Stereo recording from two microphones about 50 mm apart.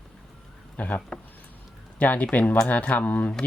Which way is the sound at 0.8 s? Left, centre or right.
Left.